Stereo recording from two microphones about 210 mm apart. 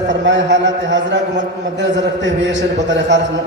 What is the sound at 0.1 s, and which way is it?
A man's voice, 60° right (ahead or behind).